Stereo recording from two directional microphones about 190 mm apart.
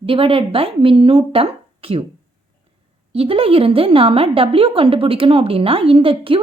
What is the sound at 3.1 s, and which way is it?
A woman's voice, 30° right (ahead or behind).